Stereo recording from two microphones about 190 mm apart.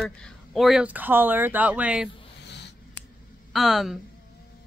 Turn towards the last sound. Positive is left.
turn(degrees=0)  # may be behind; listen again after turning